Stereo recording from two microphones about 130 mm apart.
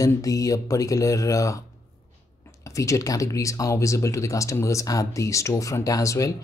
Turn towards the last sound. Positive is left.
turn(degrees=25)  # may be behind; listen again after turning